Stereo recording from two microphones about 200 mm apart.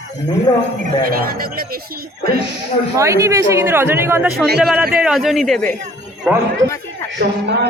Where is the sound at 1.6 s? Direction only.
50° right (ahead or behind).